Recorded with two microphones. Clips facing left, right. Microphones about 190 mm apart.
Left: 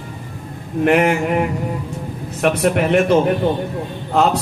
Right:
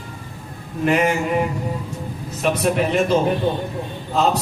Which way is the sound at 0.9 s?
60° left (ahead or behind).